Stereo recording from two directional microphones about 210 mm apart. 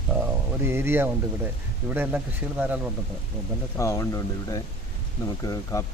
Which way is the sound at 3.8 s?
15° left (ahead or behind).